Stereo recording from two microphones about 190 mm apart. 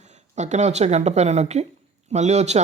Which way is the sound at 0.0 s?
35° right (ahead or behind).